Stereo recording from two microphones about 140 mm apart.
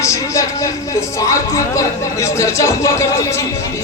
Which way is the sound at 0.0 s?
20° left (ahead or behind).